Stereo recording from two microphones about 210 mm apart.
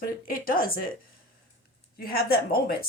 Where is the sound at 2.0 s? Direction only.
45° left (ahead or behind).